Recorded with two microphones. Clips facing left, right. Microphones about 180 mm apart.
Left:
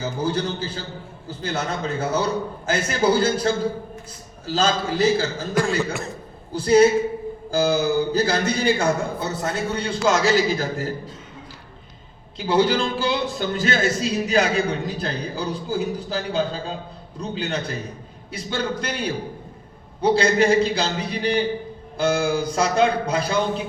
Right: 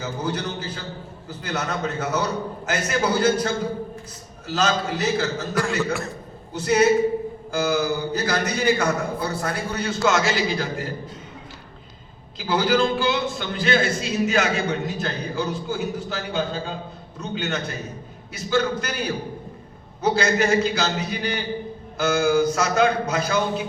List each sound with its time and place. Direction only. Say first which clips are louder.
0.0 s a man's voice: left 3 dB; 30° left (ahead or behind)
12.5 s a man's voice: left 1 dB; 30° left (ahead or behind)